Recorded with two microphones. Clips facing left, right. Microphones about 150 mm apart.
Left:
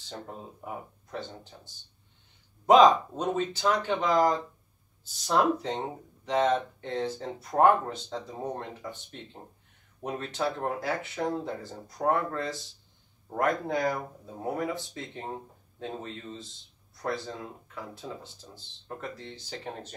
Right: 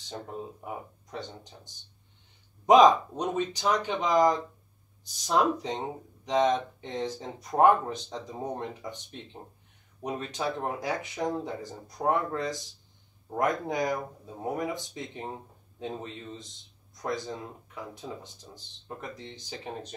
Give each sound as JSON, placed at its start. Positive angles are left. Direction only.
{"t": 1.1, "sound": "speech", "side_deg": -15}